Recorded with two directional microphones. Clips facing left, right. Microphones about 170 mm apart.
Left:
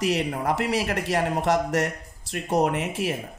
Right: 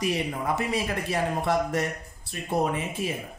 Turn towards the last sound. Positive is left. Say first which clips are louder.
# left 3 dB
turn(degrees=75)  # may be behind; listen again after turning